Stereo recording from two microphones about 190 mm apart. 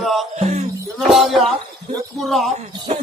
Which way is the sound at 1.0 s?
Centre (ahead or behind).